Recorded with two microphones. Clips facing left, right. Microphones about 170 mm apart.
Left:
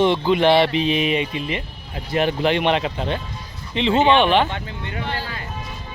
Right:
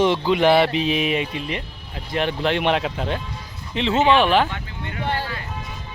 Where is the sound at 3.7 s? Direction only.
Centre (ahead or behind).